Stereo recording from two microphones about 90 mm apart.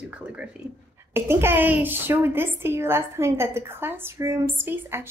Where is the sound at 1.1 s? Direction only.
25° right (ahead or behind).